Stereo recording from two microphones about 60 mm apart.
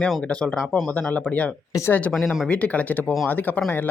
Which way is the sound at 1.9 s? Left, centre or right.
Left.